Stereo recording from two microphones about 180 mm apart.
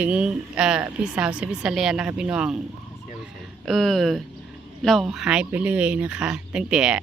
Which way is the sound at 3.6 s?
Centre (ahead or behind).